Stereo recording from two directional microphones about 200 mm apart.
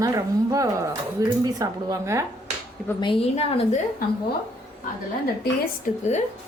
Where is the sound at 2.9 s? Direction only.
25° left (ahead or behind).